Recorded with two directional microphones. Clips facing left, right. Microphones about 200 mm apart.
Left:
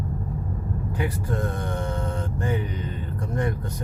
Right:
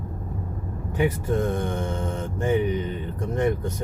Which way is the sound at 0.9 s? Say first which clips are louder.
Right 6 dB; 20° right (ahead or behind).